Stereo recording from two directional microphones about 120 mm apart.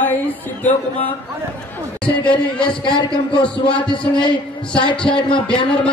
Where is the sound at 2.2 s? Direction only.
45° left (ahead or behind).